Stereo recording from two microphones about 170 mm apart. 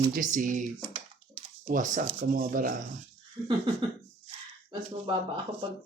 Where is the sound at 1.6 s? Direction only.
50° right (ahead or behind).